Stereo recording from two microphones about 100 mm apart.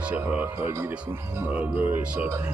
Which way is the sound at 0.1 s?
15° right (ahead or behind).